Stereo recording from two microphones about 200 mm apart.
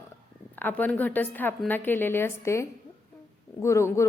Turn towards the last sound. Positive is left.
turn(degrees=15)  # may be behind; listen again after turning